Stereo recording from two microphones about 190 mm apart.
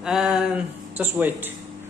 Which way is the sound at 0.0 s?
Centre (ahead or behind).